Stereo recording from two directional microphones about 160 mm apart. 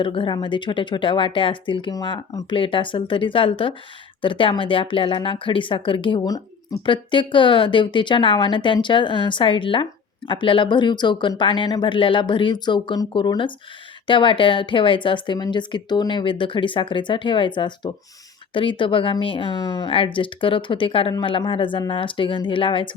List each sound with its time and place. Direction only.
0.0 s speech: 30° left (ahead or behind)